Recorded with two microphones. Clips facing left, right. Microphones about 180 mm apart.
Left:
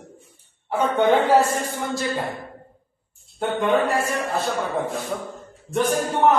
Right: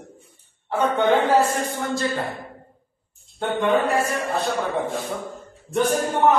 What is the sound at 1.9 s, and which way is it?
Speech, 15° left (ahead or behind).